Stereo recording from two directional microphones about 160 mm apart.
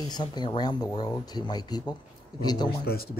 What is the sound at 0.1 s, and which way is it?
Speech, 25° left (ahead or behind).